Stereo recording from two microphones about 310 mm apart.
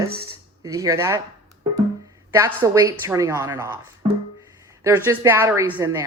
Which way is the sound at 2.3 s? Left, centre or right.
Centre.